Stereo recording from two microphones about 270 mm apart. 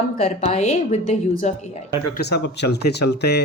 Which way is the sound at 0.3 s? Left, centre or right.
Left.